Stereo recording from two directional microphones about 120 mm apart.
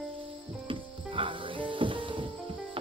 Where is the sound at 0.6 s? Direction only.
45° right (ahead or behind).